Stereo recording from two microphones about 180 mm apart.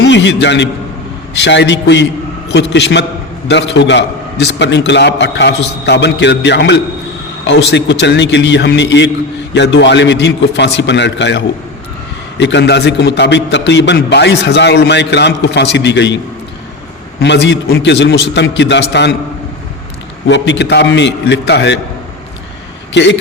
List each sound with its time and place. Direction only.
0.0 s a man's voice: 90° left; by 19.1 s 70° left (ahead or behind)
20.2 s a man's voice: 80° left
23.0 s a man's voice: 75° left (ahead or behind)